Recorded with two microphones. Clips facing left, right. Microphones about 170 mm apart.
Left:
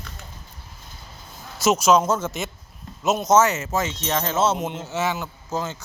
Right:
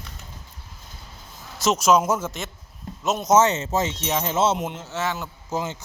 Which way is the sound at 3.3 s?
25° right (ahead or behind).